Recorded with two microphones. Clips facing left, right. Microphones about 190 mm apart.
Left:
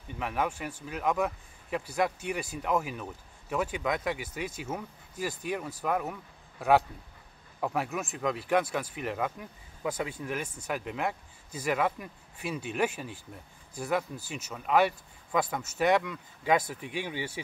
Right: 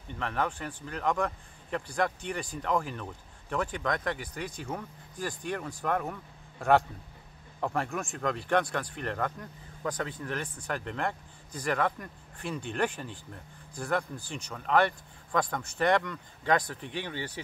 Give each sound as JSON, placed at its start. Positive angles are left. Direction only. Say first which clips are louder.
{"t": 0.2, "sound": "a man's voice", "louder": "left 1 dB", "side_deg": 10}